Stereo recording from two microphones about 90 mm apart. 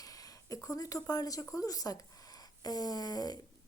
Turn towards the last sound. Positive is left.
turn(degrees=45)  # may be behind; listen again after turning